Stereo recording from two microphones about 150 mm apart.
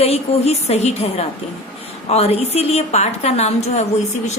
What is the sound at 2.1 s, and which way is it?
A woman's voice, 45° left (ahead or behind).